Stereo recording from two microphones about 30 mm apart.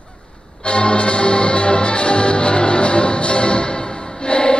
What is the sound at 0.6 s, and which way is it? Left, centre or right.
Music, left.